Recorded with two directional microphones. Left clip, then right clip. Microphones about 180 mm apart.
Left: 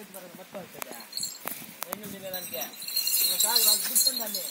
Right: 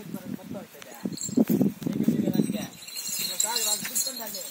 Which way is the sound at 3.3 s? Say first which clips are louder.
Left 3 dB; 5° right (ahead or behind).